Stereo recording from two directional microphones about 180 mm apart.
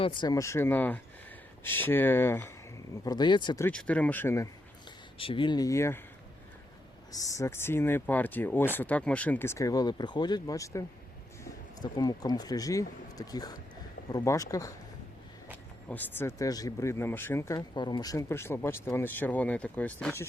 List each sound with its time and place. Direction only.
0.0 s speech: 25° left (ahead or behind)
3.7 s speech: 5° left (ahead or behind)
5.1 s speech: 30° left (ahead or behind)
7.1 s speech: 20° left (ahead or behind)
15.9 s speech: 10° left (ahead or behind)
17.7 s speech: 25° left (ahead or behind); by 20.1 s 5° left (ahead or behind)